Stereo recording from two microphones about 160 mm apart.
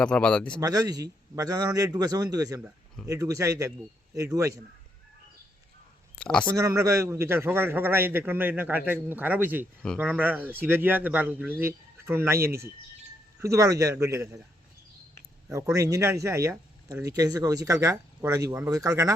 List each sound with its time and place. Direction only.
0.0 s a man's voice: 5° left (ahead or behind)
0.6 s speech: 25° right (ahead or behind)
6.1 s speech: 5° left (ahead or behind)
6.4 s a man's voice: 20° right (ahead or behind)
15.7 s speech: 20° right (ahead or behind)